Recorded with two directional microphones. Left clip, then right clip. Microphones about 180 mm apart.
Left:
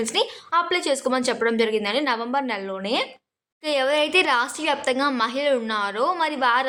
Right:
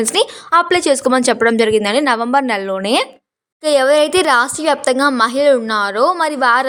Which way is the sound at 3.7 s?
40° right (ahead or behind).